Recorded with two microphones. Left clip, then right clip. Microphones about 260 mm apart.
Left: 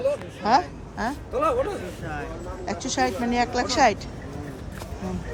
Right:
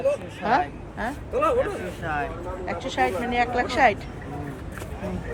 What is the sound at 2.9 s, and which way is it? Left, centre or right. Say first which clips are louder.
A woman's voice: even; centre.